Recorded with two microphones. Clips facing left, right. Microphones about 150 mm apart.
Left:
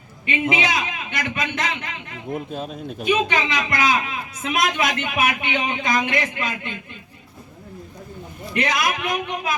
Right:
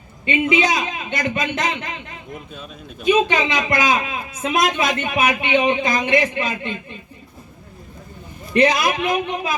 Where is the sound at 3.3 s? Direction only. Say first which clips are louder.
Right 3 dB; 25° right (ahead or behind).